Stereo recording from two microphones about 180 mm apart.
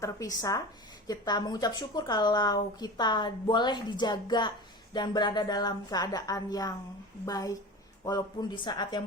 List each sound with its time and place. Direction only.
0.0 s a woman's voice: 20° left (ahead or behind)